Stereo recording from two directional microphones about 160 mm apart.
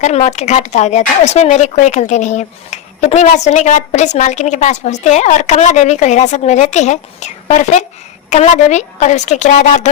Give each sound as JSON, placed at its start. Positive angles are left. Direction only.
{"t": 0.0, "sound": "speech", "side_deg": 45}